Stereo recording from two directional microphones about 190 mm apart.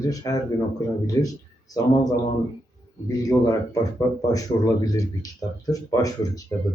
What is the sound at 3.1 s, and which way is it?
Speech, 20° left (ahead or behind).